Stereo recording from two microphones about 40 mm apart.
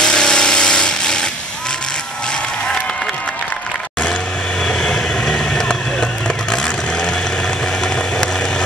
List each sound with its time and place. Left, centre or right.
0.0 s tools: left
4.6 s vehicle: left